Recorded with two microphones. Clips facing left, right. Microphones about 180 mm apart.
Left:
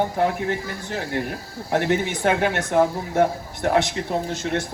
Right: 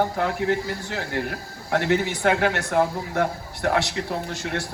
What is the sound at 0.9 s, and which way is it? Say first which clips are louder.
A man's voice: left 1 dB; 20° left (ahead or behind).